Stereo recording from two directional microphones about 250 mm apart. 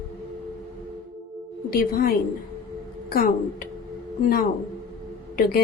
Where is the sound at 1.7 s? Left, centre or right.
Left.